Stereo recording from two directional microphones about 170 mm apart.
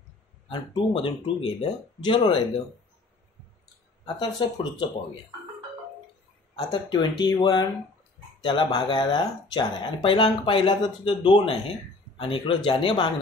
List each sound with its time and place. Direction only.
0.5 s speech: 30° left (ahead or behind)
4.0 s speech: 25° left (ahead or behind)
6.7 s speech: 25° left (ahead or behind)